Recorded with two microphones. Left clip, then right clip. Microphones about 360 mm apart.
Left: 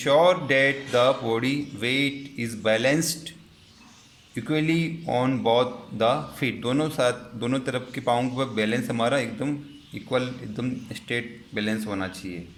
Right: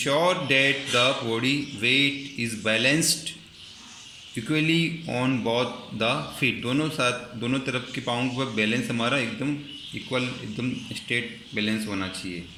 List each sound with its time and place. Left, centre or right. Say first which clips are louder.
0.0 s speech: left 4 dB; left
4.4 s speech: right 1 dB; left